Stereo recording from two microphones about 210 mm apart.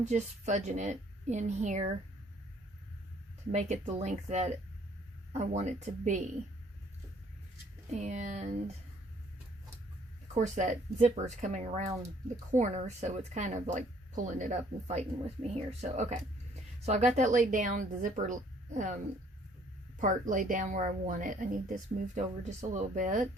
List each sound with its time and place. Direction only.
0.0 s speech: 35° right (ahead or behind)
3.5 s speech: 35° right (ahead or behind)
7.9 s speech: 35° right (ahead or behind)
10.3 s speech: 35° right (ahead or behind)
20.0 s speech: 40° right (ahead or behind)